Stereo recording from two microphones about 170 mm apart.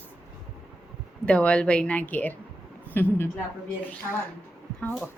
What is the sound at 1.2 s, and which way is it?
A woman's voice, 5° left (ahead or behind).